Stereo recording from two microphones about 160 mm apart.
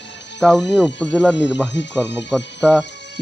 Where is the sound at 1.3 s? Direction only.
90° left.